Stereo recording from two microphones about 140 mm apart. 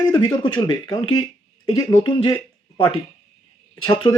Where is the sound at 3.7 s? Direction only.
30° left (ahead or behind).